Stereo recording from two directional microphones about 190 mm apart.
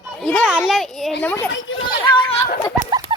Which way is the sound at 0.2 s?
5° left (ahead or behind).